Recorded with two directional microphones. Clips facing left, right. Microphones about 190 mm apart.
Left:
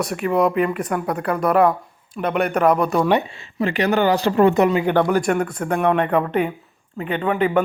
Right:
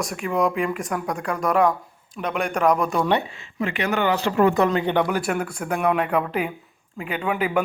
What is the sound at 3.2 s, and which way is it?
Speech, 35° left (ahead or behind).